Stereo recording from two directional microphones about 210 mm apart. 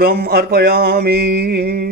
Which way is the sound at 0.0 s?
45° right (ahead or behind).